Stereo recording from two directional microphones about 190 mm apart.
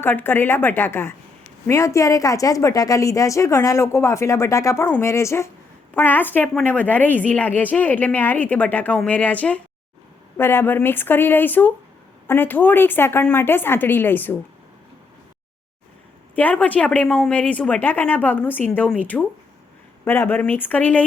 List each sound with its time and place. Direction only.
0.0 s a woman's voice: 10° left (ahead or behind)
16.3 s a woman's voice: 10° left (ahead or behind)